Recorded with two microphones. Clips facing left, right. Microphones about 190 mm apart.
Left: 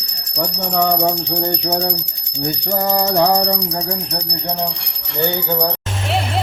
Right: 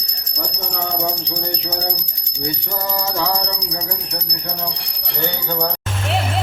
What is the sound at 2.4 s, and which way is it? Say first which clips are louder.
Music: left 5 dB; 50° left (ahead or behind).